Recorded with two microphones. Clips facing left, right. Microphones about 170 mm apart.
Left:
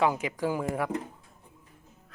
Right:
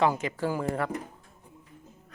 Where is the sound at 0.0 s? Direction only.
10° left (ahead or behind).